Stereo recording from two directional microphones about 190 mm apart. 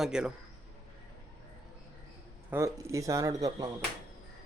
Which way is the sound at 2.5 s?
15° right (ahead or behind).